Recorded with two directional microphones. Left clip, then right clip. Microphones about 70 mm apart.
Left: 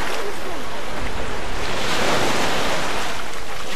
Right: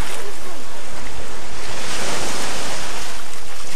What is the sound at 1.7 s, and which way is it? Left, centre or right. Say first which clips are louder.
Waves: left 5 dB; right.